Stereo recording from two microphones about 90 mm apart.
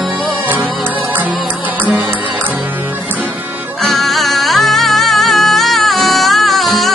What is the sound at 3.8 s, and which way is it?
Music, 5° left (ahead or behind).